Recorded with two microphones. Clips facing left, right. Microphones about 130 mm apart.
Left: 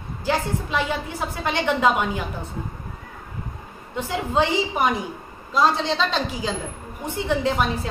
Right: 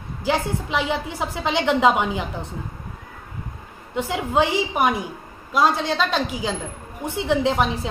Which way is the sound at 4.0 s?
15° right (ahead or behind).